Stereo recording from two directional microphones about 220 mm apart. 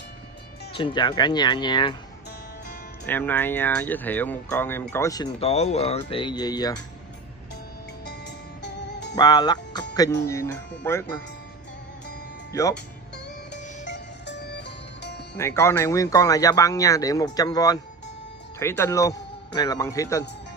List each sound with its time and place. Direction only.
0.7 s speech: 20° left (ahead or behind)
3.1 s speech: 10° left (ahead or behind)
5.4 s speech: 30° left (ahead or behind)
9.1 s speech: 20° left (ahead or behind)
12.5 s speech: 15° left (ahead or behind)
13.5 s music: 50° left (ahead or behind)
15.3 s speech: 10° left (ahead or behind)